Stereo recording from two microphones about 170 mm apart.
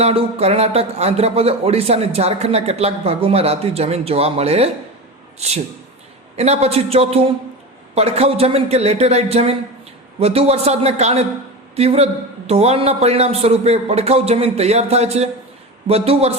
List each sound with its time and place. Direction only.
0.0 s a man's voice: 35° right (ahead or behind)
6.3 s a man's voice: 40° right (ahead or behind)